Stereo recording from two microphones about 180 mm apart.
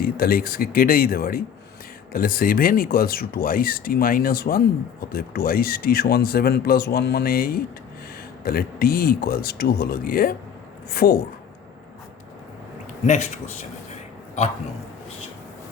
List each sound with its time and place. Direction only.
0.0 s speech: 55° left (ahead or behind)
13.1 s speech: 40° left (ahead or behind)